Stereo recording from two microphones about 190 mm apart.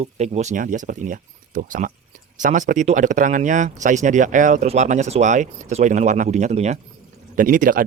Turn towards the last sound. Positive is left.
turn(degrees=-45)  # may be behind; listen again after turning